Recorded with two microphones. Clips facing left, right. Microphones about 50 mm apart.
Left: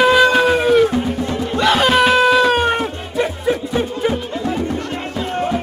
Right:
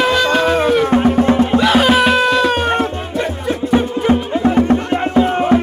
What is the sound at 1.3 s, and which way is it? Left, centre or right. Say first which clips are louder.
Music: right 8 dB; right.